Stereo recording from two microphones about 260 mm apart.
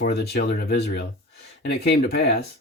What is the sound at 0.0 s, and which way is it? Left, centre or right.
Speech, left.